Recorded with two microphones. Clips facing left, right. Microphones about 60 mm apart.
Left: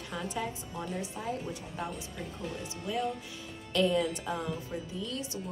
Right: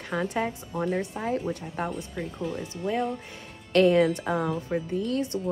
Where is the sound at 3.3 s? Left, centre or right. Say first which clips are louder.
Right 9 dB; right.